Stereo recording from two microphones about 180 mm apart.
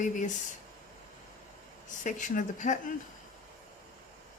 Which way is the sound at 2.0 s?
45° left (ahead or behind).